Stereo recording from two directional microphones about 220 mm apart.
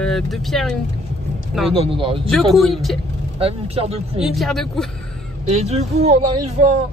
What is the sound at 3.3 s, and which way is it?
Speech, 25° right (ahead or behind).